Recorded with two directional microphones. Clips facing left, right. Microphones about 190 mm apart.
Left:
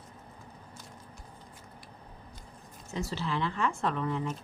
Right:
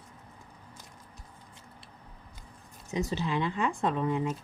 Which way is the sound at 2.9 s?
20° right (ahead or behind).